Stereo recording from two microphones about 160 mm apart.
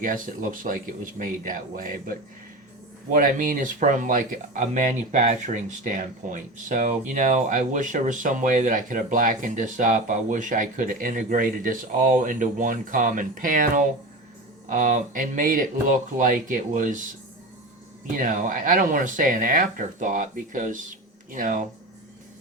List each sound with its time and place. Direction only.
0.0 s speech: 55° right (ahead or behind)
18.2 s speech: 55° right (ahead or behind)